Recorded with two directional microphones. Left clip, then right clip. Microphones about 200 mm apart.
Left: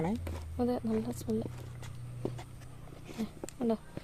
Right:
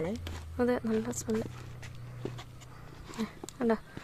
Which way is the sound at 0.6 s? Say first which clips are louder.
Right 3 dB; 10° right (ahead or behind).